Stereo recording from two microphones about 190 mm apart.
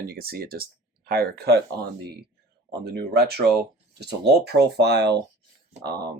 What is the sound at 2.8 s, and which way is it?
Speech, 55° right (ahead or behind).